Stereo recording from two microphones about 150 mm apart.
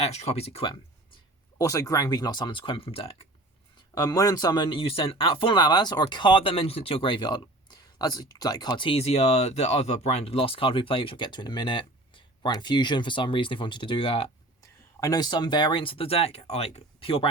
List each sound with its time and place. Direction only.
0.0 s speech: 45° left (ahead or behind)
1.5 s speech: 20° left (ahead or behind); by 3.2 s 40° left (ahead or behind)
3.9 s speech: 25° left (ahead or behind)
14.6 s speech: 25° left (ahead or behind)